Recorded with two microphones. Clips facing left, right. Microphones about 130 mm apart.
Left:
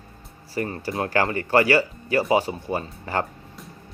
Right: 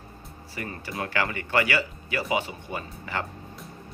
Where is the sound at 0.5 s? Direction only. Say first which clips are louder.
Left 7 dB; 35° left (ahead or behind).